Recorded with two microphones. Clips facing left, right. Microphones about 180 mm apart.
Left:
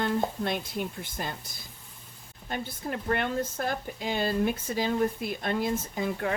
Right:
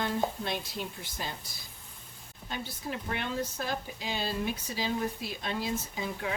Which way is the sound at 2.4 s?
50° left (ahead or behind).